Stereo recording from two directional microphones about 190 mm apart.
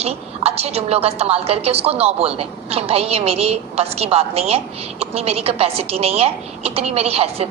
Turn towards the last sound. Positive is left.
turn(degrees=-30)  # may be behind; listen again after turning